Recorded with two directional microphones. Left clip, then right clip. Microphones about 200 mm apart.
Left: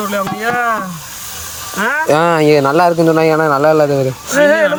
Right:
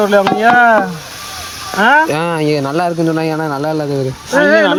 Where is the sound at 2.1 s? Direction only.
Centre (ahead or behind).